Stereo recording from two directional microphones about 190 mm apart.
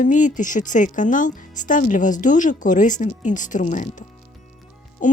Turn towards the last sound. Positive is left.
turn(degrees=45)  # may be behind; listen again after turning